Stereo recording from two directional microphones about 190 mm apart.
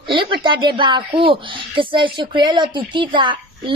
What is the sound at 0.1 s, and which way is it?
A woman's voice, 25° right (ahead or behind).